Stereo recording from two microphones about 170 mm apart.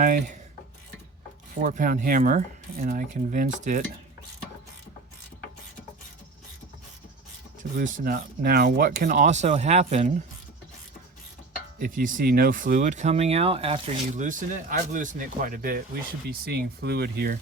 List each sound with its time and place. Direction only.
1.6 s speech: 50° right (ahead or behind)
7.6 s speech: 60° right (ahead or behind); by 10.2 s 45° right (ahead or behind)
11.8 s speech: 55° right (ahead or behind); by 14.3 s 35° right (ahead or behind)
14.3 s speech: 50° right (ahead or behind)
16.5 s speech: 75° right (ahead or behind)